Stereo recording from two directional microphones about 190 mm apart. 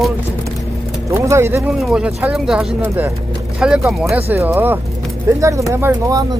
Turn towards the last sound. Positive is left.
turn(degrees=-15)  # may be behind; listen again after turning